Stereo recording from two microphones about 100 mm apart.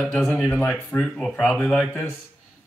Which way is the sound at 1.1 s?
Centre (ahead or behind).